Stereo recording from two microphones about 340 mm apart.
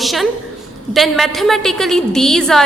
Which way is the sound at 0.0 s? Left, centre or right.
Centre.